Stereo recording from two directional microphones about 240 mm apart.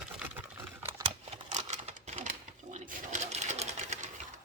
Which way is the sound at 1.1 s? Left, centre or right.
Right.